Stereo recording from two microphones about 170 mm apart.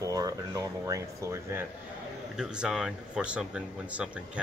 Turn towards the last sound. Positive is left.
turn(degrees=-5)  # may be behind; listen again after turning